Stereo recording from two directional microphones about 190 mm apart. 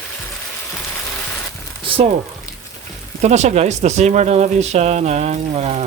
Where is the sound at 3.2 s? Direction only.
35° right (ahead or behind).